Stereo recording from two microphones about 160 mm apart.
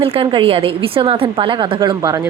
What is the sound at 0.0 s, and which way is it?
A woman's voice, 35° right (ahead or behind).